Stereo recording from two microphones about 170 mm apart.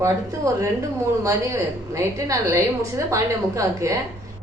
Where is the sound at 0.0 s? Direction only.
15° right (ahead or behind).